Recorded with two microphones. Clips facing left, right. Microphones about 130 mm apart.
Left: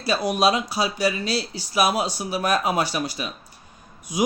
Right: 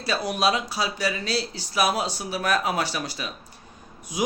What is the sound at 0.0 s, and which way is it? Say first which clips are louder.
Speech: left 3 dB; 15° left (ahead or behind).